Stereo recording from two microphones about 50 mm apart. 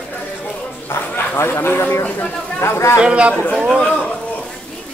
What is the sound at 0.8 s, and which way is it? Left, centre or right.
Speech, left.